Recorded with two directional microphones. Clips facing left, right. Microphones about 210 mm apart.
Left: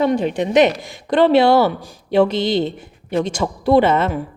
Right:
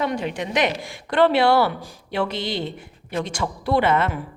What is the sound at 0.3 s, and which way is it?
Speech, 20° left (ahead or behind).